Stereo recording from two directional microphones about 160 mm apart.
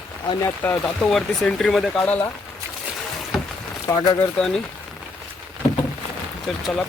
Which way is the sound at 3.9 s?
20° left (ahead or behind).